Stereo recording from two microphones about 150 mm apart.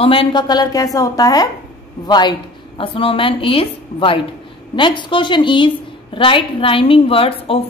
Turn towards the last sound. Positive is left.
turn(degrees=40)  # may be behind; listen again after turning